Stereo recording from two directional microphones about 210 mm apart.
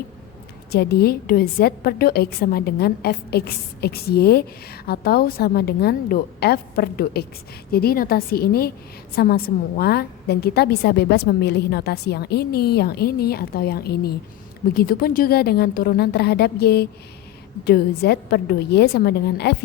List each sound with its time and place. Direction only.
0.7 s a woman's voice: 50° left (ahead or behind)